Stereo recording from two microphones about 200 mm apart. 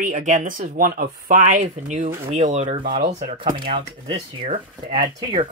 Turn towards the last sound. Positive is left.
turn(degrees=-25)  # may be behind; listen again after turning